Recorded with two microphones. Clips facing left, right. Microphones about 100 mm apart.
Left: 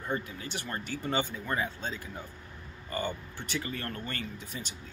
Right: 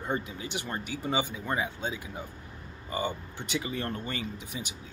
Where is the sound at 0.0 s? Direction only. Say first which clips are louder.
Right 2 dB; 20° right (ahead or behind).